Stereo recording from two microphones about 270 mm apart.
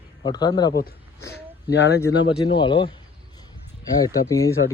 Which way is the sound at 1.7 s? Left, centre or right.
Left.